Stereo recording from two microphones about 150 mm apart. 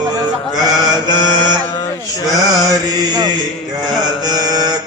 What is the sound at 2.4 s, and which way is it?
Mantra, 25° right (ahead or behind).